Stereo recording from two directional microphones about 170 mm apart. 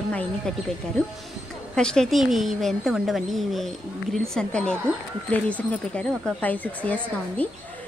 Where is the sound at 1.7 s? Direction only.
5° left (ahead or behind).